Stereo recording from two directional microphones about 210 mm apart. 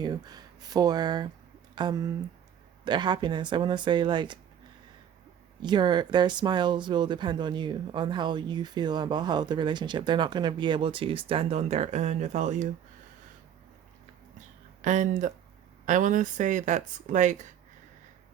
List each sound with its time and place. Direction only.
0.0 s speech: 20° right (ahead or behind)
5.6 s speech: 20° right (ahead or behind)
14.8 s speech: 35° right (ahead or behind)